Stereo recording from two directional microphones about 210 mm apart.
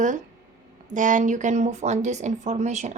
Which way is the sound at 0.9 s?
35° right (ahead or behind).